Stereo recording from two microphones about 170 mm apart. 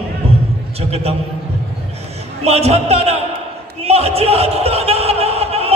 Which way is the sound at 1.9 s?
40° right (ahead or behind).